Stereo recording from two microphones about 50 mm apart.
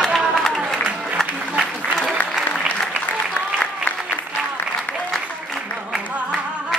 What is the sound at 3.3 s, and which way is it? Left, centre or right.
Applause, left.